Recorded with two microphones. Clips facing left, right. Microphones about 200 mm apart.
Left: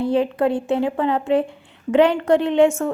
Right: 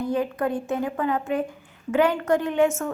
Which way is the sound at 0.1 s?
30° left (ahead or behind).